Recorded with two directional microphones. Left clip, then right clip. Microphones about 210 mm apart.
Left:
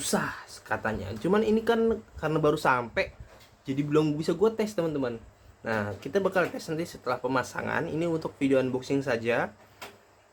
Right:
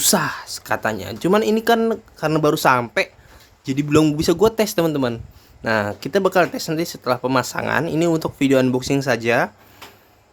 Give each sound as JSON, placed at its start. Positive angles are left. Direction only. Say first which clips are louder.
{"t": 0.0, "sound": "speech", "louder": "right 10 dB", "side_deg": -50}